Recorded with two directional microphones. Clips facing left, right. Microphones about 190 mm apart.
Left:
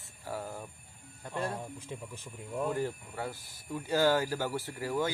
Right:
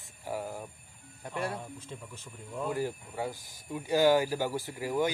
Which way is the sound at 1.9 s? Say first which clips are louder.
Left 2 dB; 15° left (ahead or behind).